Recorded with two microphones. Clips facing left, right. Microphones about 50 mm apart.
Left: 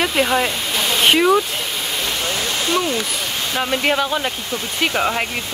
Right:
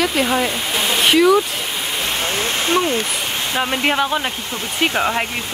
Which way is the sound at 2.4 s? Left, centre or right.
Right.